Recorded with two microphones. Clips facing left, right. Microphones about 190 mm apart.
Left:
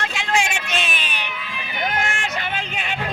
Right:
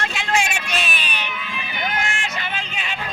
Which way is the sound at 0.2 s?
20° left (ahead or behind).